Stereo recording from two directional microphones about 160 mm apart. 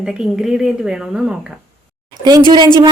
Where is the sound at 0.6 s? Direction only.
5° right (ahead or behind).